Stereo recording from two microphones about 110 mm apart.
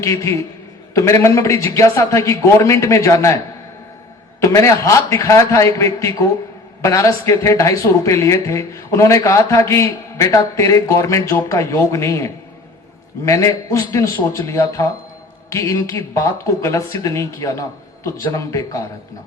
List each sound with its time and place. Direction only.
0.0 s speech: 30° left (ahead or behind)
4.4 s speech: 30° left (ahead or behind)